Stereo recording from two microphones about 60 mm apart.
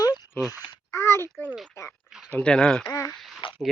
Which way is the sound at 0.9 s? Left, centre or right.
Left.